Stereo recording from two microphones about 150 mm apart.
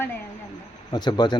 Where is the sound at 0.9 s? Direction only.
30° left (ahead or behind).